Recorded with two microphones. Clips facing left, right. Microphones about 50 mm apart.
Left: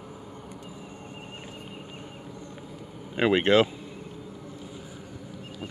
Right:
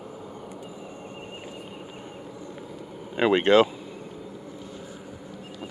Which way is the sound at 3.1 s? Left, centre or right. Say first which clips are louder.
Right 2 dB; centre.